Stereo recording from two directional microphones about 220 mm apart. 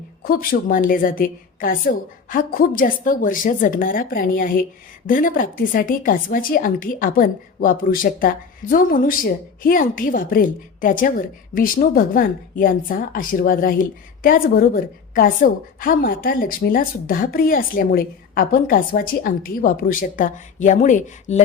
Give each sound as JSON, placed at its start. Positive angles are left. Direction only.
{"t": 0.3, "sound": "a woman's voice", "side_deg": 40}